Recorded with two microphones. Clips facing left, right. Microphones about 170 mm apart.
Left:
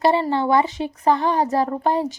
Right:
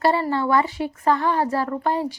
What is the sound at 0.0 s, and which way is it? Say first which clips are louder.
A woman's voice: left 2 dB; 20° left (ahead or behind).